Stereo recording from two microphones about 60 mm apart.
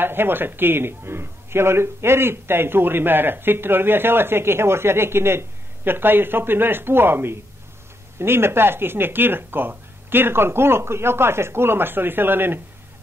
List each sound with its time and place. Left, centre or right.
0.0 s a man's voice: right